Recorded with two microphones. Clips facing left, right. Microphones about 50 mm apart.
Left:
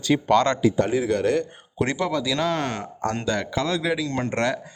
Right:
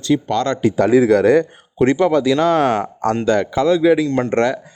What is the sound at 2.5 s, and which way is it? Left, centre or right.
Speech, centre.